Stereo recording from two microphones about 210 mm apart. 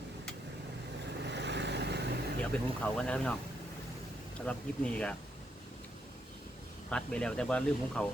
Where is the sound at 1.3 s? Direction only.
55° right (ahead or behind).